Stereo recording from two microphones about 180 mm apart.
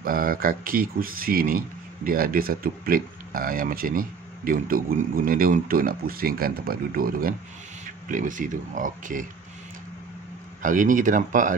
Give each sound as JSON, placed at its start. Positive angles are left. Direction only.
{"t": 0.0, "sound": "speech", "side_deg": -50}
{"t": 10.6, "sound": "speech", "side_deg": -45}